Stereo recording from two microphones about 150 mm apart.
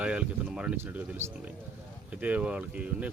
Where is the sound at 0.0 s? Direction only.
10° right (ahead or behind).